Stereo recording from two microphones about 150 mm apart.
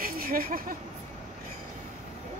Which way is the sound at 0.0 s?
75° right (ahead or behind).